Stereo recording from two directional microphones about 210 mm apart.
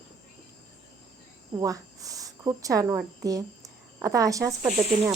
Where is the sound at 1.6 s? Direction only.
15° right (ahead or behind).